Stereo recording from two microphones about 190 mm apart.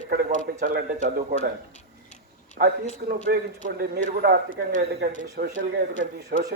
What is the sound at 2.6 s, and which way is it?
A man's voice, 55° right (ahead or behind).